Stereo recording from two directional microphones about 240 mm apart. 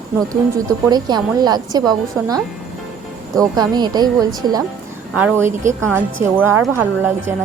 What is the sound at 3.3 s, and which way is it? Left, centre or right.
A woman's voice, centre.